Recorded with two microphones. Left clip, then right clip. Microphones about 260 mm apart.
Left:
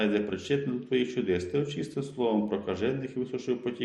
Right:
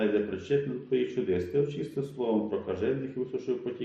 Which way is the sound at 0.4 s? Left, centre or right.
Left.